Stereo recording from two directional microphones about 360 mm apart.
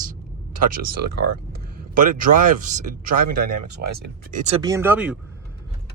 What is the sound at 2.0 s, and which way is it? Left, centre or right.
Speech, right.